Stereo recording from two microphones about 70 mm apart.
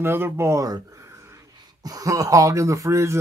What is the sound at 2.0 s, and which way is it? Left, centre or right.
Speech, right.